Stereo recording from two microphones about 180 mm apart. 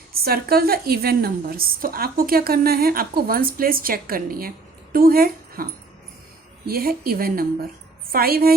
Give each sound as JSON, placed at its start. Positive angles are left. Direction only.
{"t": 0.1, "sound": "a woman's voice", "side_deg": -55}
{"t": 6.7, "sound": "a woman's voice", "side_deg": -55}